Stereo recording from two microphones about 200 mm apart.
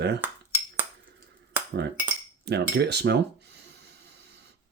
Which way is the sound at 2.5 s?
55° right (ahead or behind).